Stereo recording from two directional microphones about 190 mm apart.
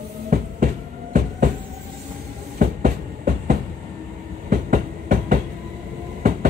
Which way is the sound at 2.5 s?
45° right (ahead or behind).